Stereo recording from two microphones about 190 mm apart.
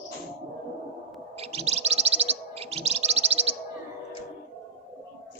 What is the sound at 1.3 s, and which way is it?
Chirp, 35° right (ahead or behind).